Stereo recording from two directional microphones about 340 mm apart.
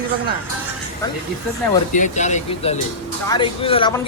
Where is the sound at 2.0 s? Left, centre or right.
Left.